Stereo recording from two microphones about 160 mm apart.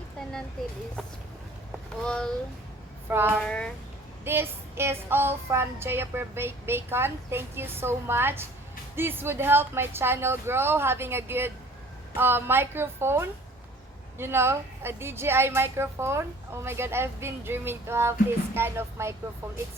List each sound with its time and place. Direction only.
2.0 s speech: 5° left (ahead or behind)
3.1 s child singing: 15° right (ahead or behind)
3.3 s speech: 5° left (ahead or behind)
4.2 s child singing: 15° right (ahead or behind)